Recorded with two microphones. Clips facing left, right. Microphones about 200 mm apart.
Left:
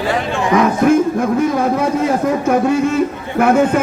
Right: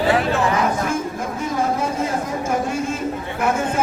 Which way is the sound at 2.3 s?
65° left (ahead or behind).